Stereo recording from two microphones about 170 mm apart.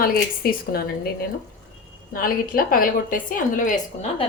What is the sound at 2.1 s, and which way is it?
A woman's voice, 60° left (ahead or behind).